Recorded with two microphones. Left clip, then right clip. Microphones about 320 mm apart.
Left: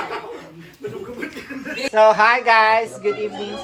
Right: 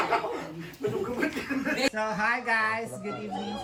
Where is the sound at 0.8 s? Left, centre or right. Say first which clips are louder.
Right 1 dB; centre.